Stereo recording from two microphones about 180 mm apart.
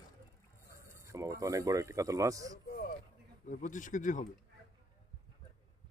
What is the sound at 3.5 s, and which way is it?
Speech, 45° left (ahead or behind).